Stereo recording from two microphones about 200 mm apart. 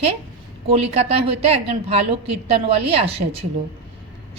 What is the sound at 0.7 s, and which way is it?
A woman's voice, 30° right (ahead or behind).